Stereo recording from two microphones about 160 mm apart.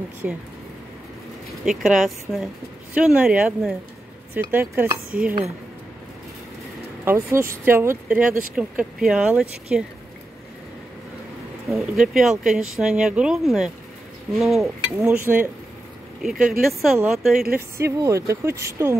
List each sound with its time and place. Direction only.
0.2 s speech: 5° right (ahead or behind)
1.7 s speech: 5° right (ahead or behind)
7.1 s speech: 15° right (ahead or behind)
11.7 s speech: 5° right (ahead or behind)
15.0 s speech: 15° right (ahead or behind)
17.6 s speech: 15° right (ahead or behind)